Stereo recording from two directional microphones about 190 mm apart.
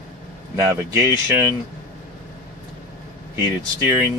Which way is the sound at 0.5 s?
15° right (ahead or behind).